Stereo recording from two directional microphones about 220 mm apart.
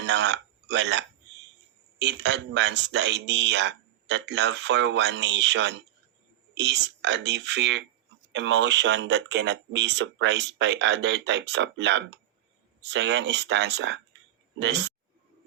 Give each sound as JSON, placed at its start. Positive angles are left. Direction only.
{"t": 0.0, "sound": "speech", "side_deg": -50}